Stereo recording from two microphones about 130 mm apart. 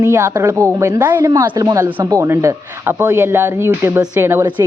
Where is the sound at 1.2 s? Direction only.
30° right (ahead or behind).